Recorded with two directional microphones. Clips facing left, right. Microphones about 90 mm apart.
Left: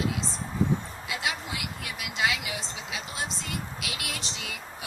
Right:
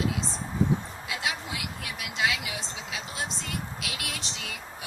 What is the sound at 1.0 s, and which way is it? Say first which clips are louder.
Speech: even; centre (ahead or behind).